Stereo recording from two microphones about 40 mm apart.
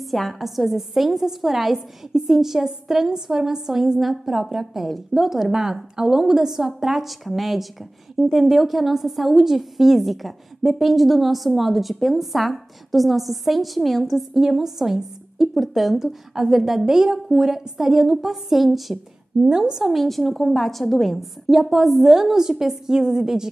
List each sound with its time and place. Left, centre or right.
0.0 s a woman's voice: centre
19.4 s a woman's voice: centre
19.8 s a woman's voice: centre